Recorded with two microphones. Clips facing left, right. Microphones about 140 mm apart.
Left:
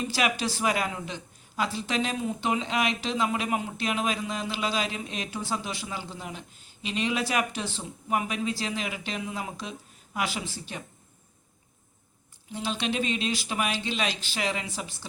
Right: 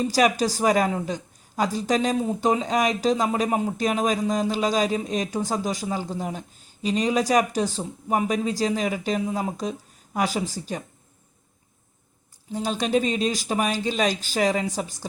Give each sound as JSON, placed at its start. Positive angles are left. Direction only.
{"t": 0.0, "sound": "a woman's voice", "side_deg": -40}
{"t": 12.5, "sound": "a woman's voice", "side_deg": -40}